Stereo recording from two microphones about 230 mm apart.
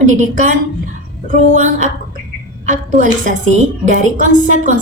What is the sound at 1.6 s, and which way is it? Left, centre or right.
A woman's voice, right.